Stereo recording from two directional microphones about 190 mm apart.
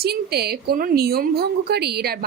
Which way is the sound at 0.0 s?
55° right (ahead or behind).